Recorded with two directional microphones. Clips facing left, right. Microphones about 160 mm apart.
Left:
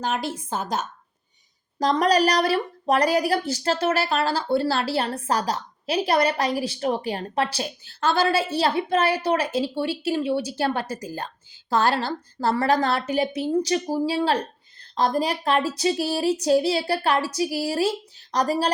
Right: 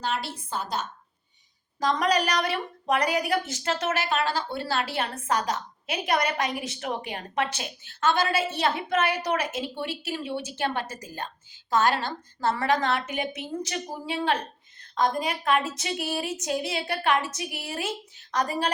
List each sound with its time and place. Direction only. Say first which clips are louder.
0.0 s a woman's voice: left 4 dB; 45° left (ahead or behind)
1.8 s a woman's voice: left 5 dB; 35° left (ahead or behind)